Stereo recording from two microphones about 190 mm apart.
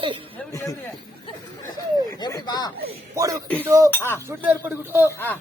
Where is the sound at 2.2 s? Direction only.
20° left (ahead or behind).